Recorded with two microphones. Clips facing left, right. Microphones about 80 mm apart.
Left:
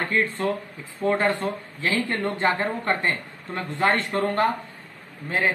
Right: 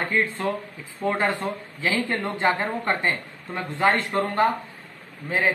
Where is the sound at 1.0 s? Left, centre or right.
Centre.